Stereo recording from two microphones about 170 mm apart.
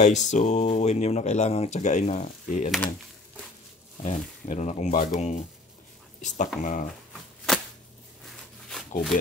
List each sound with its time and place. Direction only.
0.0 s speech: 45° left (ahead or behind)
4.0 s speech: 45° left (ahead or behind)
8.6 s a sound: centre (ahead or behind)